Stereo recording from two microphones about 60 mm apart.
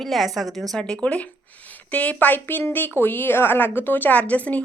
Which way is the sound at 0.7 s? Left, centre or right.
Centre.